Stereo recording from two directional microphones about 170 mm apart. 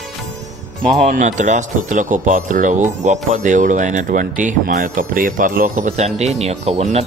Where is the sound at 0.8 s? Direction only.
40° right (ahead or behind).